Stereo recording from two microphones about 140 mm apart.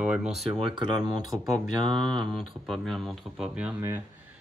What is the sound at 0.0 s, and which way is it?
Speech, 5° right (ahead or behind).